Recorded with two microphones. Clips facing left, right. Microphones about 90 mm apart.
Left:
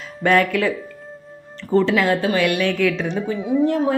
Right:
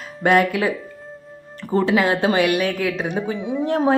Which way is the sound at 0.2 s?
20° right (ahead or behind).